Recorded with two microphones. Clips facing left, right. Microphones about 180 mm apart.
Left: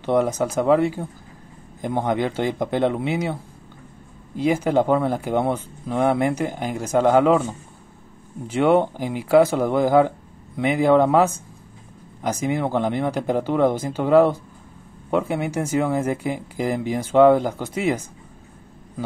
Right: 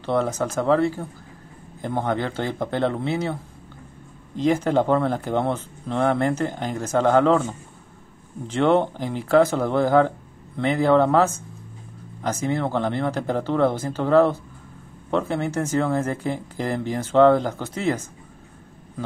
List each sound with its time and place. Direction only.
0.0 s speech: 15° left (ahead or behind)
4.4 s speech: 10° left (ahead or behind)